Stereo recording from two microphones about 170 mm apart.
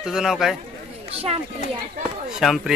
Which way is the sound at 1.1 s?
35° right (ahead or behind).